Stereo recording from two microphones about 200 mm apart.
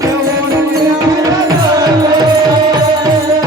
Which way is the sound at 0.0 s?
15° right (ahead or behind).